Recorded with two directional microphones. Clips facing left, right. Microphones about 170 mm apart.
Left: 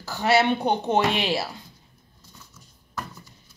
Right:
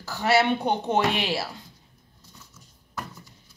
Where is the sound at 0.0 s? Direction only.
20° left (ahead or behind).